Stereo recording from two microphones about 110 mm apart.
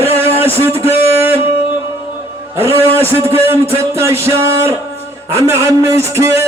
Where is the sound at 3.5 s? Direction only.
65° right (ahead or behind).